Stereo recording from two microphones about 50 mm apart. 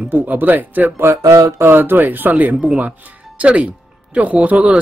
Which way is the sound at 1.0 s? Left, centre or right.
Right.